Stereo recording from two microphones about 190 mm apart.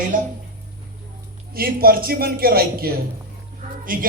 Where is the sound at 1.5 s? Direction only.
50° right (ahead or behind).